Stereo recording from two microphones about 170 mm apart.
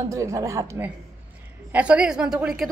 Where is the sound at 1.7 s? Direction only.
10° right (ahead or behind).